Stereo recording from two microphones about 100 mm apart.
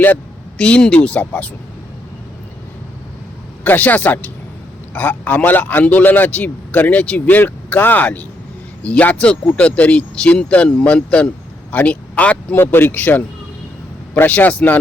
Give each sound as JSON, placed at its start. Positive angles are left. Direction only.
{"t": 0.6, "sound": "a man's voice", "side_deg": 10}
{"t": 3.6, "sound": "a man's voice", "side_deg": 15}